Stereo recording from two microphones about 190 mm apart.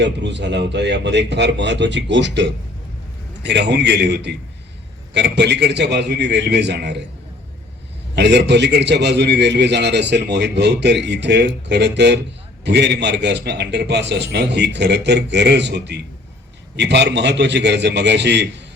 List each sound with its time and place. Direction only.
0.0 s a man's voice: 65° right (ahead or behind)
8.1 s a man's voice: 60° right (ahead or behind)